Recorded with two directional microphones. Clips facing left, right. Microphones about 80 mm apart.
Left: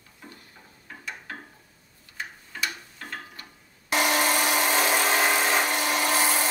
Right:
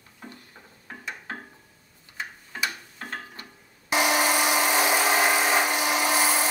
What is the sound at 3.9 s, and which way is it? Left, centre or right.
Wood, centre.